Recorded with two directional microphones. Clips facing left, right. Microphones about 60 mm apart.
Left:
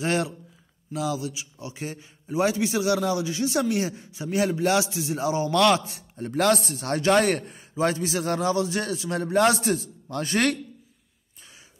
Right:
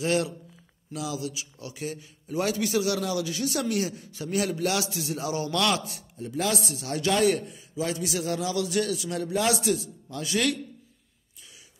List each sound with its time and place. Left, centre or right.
0.0 s a man's voice: left
6.1 s a man's voice: left